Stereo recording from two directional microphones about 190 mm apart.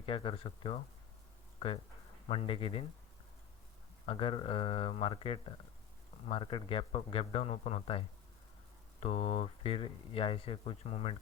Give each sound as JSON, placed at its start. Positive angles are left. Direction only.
{"t": 0.0, "sound": "speech", "side_deg": 25}
{"t": 4.0, "sound": "speech", "side_deg": 25}